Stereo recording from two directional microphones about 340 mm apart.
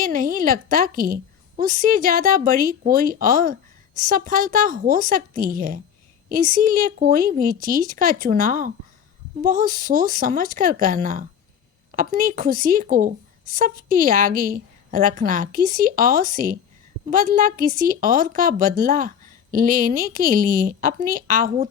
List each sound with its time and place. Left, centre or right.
0.0 s a woman's voice: right